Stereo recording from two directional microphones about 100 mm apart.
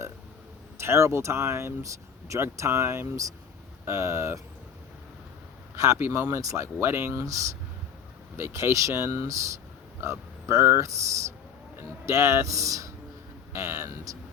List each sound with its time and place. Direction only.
0.8 s speech: 25° right (ahead or behind)
5.7 s speech: 30° right (ahead or behind)
8.4 s speech: 25° right (ahead or behind)